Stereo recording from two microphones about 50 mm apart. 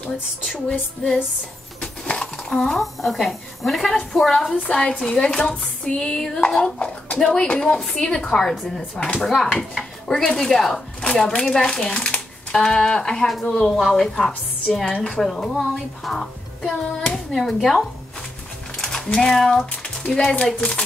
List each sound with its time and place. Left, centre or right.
0.5 s a woman's voice: centre
5.0 s a woman's voice: centre
5.6 s a sound: centre
6.1 s a woman's voice: centre
18.8 s a sound: centre
19.1 s a woman's voice: centre